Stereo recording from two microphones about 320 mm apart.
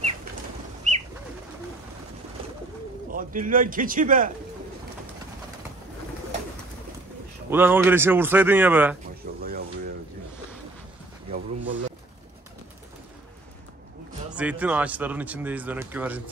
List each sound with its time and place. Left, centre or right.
0.9 s bird: right
3.1 s a man's voice: right
7.4 s speech: centre
11.3 s a sound: right
14.3 s speech: centre